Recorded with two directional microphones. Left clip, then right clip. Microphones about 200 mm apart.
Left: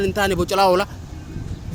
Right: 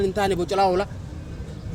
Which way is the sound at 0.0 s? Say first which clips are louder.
Left 2 dB; 35° left (ahead or behind).